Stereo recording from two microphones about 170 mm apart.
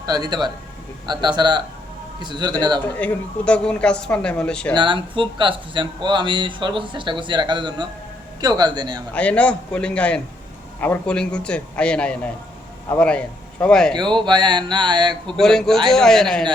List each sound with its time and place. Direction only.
0.0 s speech: 25° right (ahead or behind)
2.9 s speech: 10° left (ahead or behind)
4.7 s speech: 30° right (ahead or behind)
9.1 s a man's voice: 5° left (ahead or behind)
14.2 s speech: 25° right (ahead or behind)
15.4 s speech: 5° left (ahead or behind)